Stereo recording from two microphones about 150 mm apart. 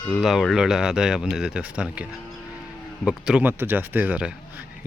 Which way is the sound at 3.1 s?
5° right (ahead or behind).